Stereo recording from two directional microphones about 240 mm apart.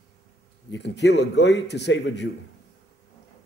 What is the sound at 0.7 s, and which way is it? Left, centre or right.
A man's voice, left.